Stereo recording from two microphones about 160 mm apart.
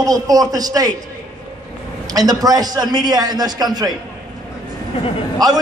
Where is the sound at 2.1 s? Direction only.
25° right (ahead or behind).